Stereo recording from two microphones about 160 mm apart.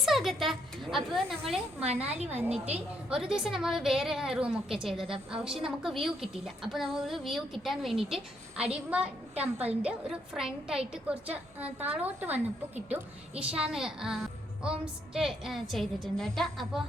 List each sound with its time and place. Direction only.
0.0 s a woman's voice: centre (ahead or behind)
2.1 s a woman's voice: 40° right (ahead or behind)
3.1 s a woman's voice: 5° right (ahead or behind)
13.6 s a woman's voice: 5° right (ahead or behind)